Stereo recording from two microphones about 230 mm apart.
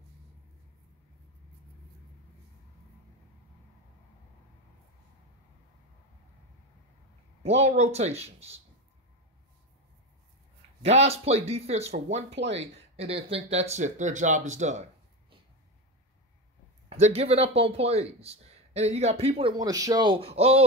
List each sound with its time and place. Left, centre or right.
7.4 s speech: right
10.8 s speech: right
16.9 s speech: right